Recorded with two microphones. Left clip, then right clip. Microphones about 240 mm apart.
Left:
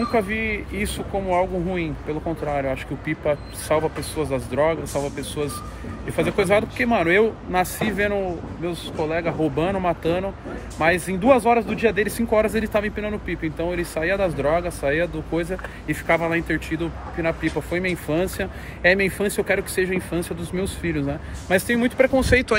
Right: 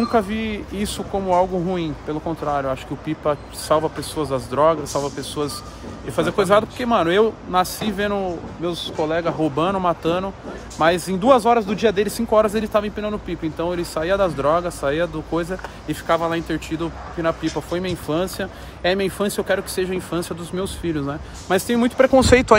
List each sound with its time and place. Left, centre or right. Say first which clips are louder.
0.1 s speech: right 1 dB; right